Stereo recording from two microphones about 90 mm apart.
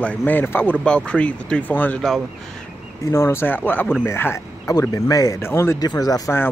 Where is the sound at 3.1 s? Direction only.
30° left (ahead or behind).